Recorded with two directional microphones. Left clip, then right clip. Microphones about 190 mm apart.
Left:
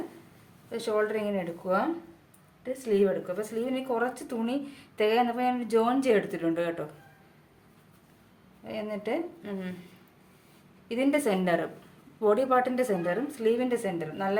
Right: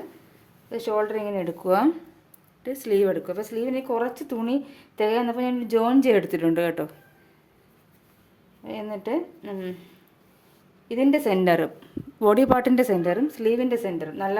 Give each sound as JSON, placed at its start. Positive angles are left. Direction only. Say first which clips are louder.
{"t": 0.7, "sound": "speech", "louder": "right 3 dB", "side_deg": -35}
{"t": 1.6, "sound": "speech", "louder": "right 8 dB", "side_deg": -60}
{"t": 8.6, "sound": "speech", "louder": "right 2 dB", "side_deg": -40}
{"t": 10.8, "sound": "a woman's voice", "louder": "right 5 dB", "side_deg": -30}